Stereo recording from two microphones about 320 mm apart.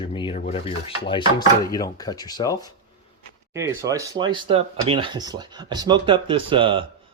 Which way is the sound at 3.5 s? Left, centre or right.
Centre.